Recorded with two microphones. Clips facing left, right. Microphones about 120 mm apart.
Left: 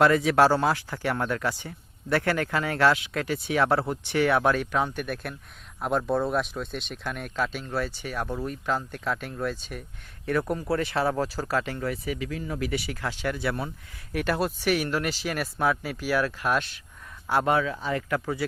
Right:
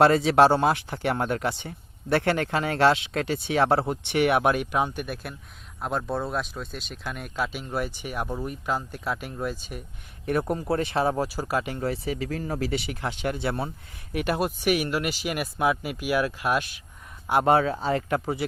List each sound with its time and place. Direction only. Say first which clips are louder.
0.0 s speech: right 2 dB; 30° right (ahead or behind); by 9.8 s 10° right (ahead or behind)
10.2 s speech: right 1 dB; 25° right (ahead or behind)
11.8 s speech: right 2 dB; 30° right (ahead or behind); by 16.8 s 10° right (ahead or behind)
17.4 s speech: right 7 dB; 35° right (ahead or behind)